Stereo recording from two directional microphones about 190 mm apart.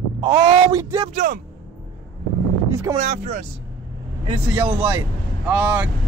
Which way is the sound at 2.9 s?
35° right (ahead or behind).